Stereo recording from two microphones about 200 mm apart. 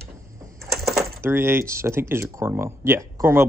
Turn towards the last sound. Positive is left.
turn(degrees=-15)  # may be behind; listen again after turning